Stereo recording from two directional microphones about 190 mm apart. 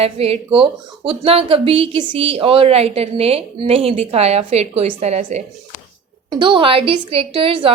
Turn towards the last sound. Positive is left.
turn(degrees=-30)  # may be behind; listen again after turning